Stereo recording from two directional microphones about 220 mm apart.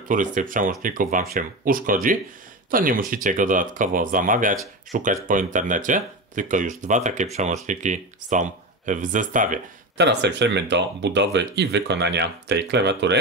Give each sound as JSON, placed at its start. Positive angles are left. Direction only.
{"t": 0.1, "sound": "speech", "side_deg": -35}
{"t": 9.9, "sound": "speech", "side_deg": -50}